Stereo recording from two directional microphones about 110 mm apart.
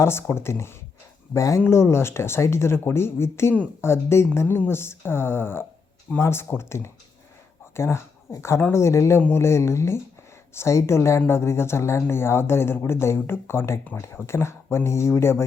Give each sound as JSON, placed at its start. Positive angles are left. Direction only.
{"t": 0.0, "sound": "speech", "side_deg": 20}